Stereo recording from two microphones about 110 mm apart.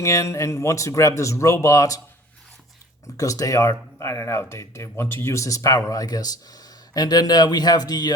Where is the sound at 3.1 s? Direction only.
30° left (ahead or behind).